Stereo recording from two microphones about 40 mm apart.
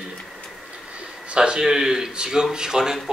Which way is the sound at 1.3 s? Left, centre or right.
Right.